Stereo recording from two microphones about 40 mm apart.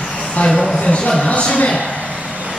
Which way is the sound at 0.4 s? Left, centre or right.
Left.